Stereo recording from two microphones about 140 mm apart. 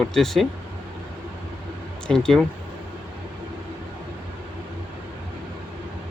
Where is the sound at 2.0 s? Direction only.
5° left (ahead or behind).